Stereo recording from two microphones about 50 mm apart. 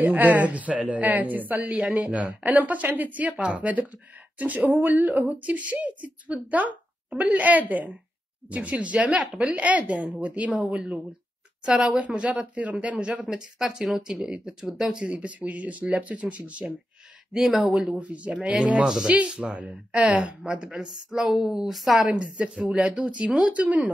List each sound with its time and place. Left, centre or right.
0.0 s speech: right
12.2 s speech: right
13.3 s speech: centre; by 16.7 s right
17.3 s speech: centre
17.7 s speech: right
19.1 s speech: right
21.1 s speech: centre
22.0 s speech: right